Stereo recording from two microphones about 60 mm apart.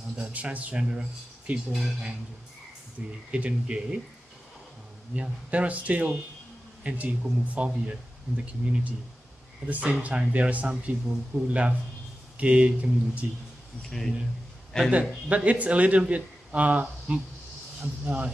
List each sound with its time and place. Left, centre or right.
0.2 s speech: right
1.8 s speech: centre
3.3 s speech: right
5.1 s speech: centre
10.7 s speech: centre
13.8 s a man's voice: centre
14.9 s speech: right